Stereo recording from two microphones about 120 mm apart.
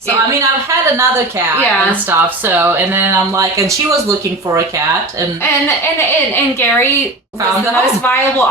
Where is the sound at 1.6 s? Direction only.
15° right (ahead or behind).